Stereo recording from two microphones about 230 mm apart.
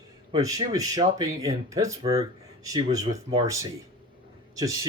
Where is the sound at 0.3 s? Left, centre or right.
Centre.